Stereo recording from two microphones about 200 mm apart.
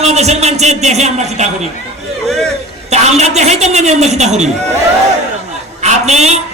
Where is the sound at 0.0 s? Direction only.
35° right (ahead or behind).